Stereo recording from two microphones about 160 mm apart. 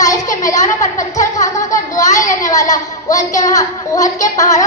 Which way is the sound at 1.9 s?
20° left (ahead or behind).